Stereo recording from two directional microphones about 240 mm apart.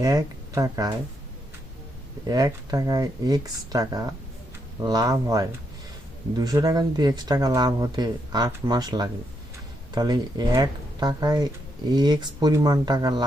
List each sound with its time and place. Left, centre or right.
0.0 s speech: centre
2.2 s speech: centre